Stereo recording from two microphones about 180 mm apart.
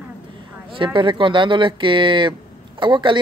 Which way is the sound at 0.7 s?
30° right (ahead or behind).